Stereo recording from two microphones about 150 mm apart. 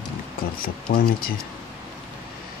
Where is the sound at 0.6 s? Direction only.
75° left (ahead or behind).